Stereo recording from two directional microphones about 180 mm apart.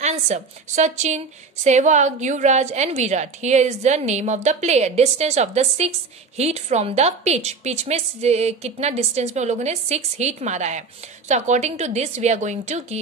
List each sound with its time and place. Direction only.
0.0 s a woman's voice: 40° right (ahead or behind)